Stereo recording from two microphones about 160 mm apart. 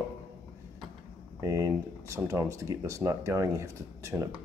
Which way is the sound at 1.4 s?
20° right (ahead or behind).